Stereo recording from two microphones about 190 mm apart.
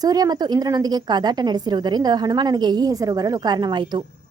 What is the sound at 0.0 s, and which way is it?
Speech, 20° right (ahead or behind).